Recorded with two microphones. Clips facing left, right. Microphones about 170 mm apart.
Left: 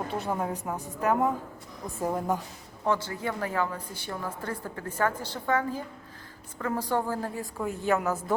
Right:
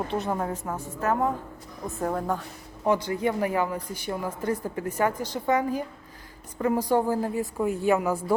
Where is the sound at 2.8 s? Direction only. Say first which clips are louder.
Right 5 dB; 15° right (ahead or behind).